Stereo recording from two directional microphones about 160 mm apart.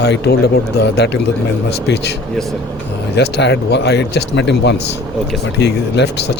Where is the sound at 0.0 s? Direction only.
85° left.